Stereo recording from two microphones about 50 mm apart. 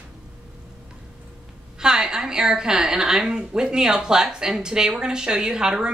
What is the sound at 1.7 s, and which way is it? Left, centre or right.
A woman's voice, centre.